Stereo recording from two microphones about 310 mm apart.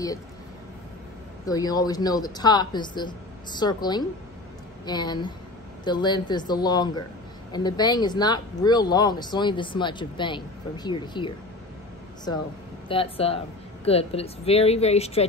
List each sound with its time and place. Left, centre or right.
1.4 s speech: centre
12.8 s speech: centre